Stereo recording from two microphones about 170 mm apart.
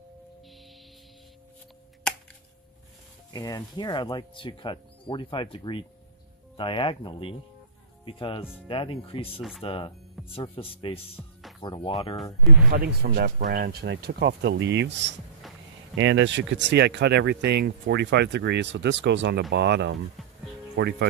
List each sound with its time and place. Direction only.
2.1 s a sound: 5° left (ahead or behind)
3.3 s speech: 20° left (ahead or behind)
11.2 s speech: 5° left (ahead or behind)
11.6 s speech: 25° left (ahead or behind)
12.7 s speech: 60° right (ahead or behind); by 15.1 s 90° right
15.4 s a sound: centre (ahead or behind)
16.0 s speech: 90° right
20.2 s music: centre (ahead or behind)
20.7 s speech: 85° right